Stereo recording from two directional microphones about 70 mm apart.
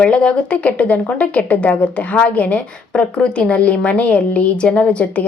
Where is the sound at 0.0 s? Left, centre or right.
Centre.